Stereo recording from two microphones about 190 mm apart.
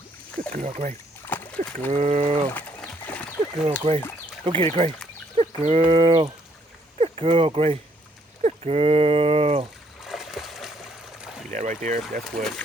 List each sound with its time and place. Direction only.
0.3 s speech: 40° right (ahead or behind)
1.2 s splash: 10° left (ahead or behind)
1.9 s speech: 35° right (ahead or behind)
2.5 s a sound: 10° left (ahead or behind)
4.4 s speech: 30° right (ahead or behind)
10.0 s splash: centre (ahead or behind)
11.5 s speech: 40° right (ahead or behind)
12.2 s speech: centre (ahead or behind)